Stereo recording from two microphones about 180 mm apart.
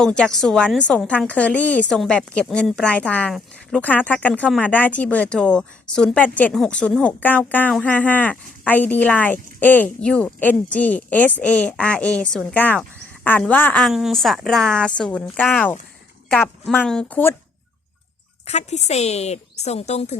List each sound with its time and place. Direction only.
0.0 s a woman's voice: 5° left (ahead or behind)
18.4 s a woman's voice: 40° left (ahead or behind)